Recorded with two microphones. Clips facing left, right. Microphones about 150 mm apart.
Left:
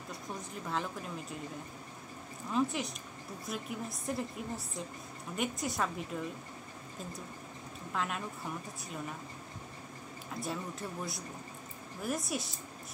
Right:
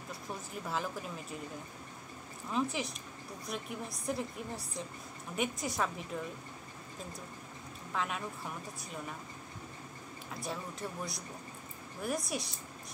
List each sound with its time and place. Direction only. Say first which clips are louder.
0.7 s a woman's voice: even; centre (ahead or behind)
2.5 s a woman's voice: left 2 dB; centre (ahead or behind)
7.9 s a woman's voice: even; centre (ahead or behind)
10.4 s a woman's voice: left 1 dB; centre (ahead or behind)